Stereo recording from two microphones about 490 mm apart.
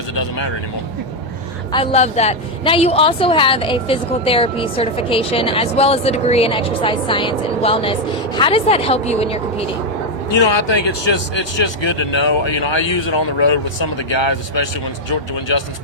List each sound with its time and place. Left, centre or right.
1.7 s a woman's voice: centre
10.3 s speech: left